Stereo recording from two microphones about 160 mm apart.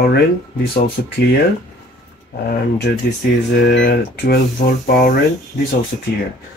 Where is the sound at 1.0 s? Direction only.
75° left (ahead or behind).